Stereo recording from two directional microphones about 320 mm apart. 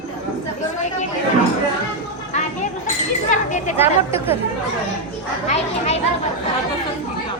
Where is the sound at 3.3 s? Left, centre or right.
Left.